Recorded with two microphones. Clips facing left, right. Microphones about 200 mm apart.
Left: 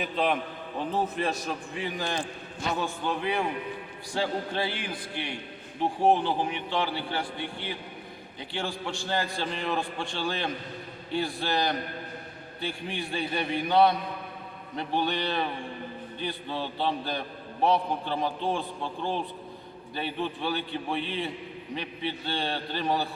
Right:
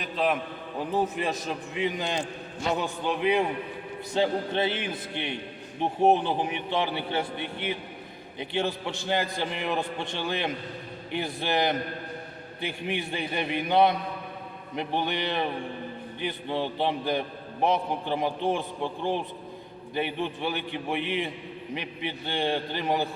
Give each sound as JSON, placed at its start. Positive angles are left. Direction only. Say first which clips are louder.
{"t": 0.0, "sound": "a man's voice", "louder": "even", "side_deg": 0}
{"t": 1.1, "sound": "a man's voice", "louder": "even", "side_deg": -15}